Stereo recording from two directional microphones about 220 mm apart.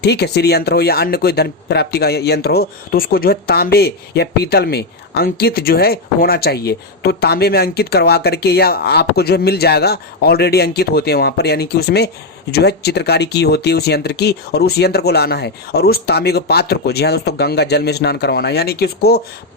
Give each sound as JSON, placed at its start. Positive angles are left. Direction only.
{"t": 0.0, "sound": "speech", "side_deg": 50}